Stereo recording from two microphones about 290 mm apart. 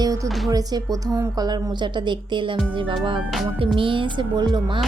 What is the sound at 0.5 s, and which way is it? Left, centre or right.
A woman's voice, centre.